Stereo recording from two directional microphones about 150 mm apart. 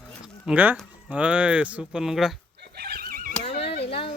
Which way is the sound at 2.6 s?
90° right.